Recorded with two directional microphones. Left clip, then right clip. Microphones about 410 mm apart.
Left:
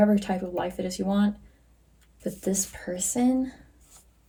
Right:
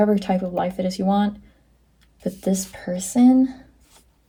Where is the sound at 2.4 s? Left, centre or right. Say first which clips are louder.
Right 4 dB; centre.